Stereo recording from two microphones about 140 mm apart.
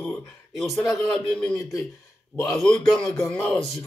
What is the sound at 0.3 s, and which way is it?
Speech, centre (ahead or behind).